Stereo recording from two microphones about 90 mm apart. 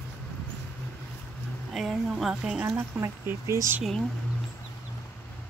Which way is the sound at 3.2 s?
30° right (ahead or behind).